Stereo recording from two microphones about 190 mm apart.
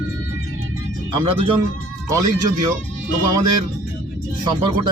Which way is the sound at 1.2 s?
30° right (ahead or behind).